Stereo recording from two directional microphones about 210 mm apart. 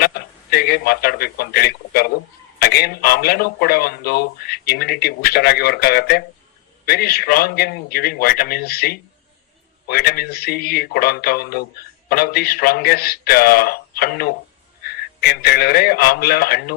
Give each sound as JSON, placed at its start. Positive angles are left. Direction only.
{"t": 0.0, "sound": "a man's voice", "side_deg": 50}
{"t": 15.4, "sound": "a man's voice", "side_deg": 50}